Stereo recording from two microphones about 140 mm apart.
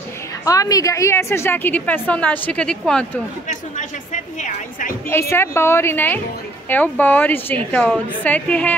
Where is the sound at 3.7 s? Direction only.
60° left (ahead or behind).